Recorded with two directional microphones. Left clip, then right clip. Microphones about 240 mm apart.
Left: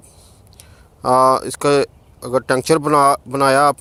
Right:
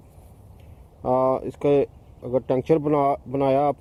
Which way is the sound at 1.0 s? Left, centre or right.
Left.